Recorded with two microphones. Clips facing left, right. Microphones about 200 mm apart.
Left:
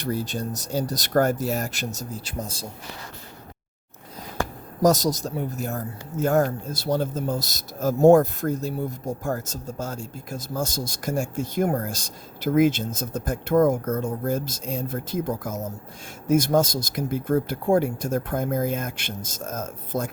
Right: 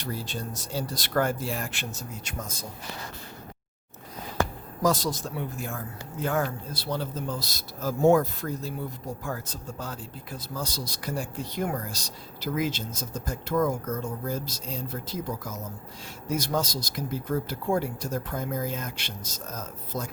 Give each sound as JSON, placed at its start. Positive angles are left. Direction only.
{"t": 0.0, "sound": "speech", "side_deg": 45}
{"t": 4.8, "sound": "speech", "side_deg": 45}